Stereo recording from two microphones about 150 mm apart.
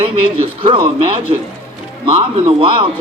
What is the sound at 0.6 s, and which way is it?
Speech, 35° right (ahead or behind).